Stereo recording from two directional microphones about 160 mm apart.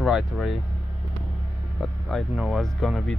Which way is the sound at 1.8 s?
Centre (ahead or behind).